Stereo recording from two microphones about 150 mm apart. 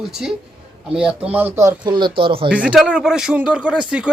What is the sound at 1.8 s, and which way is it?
Speech, 30° right (ahead or behind).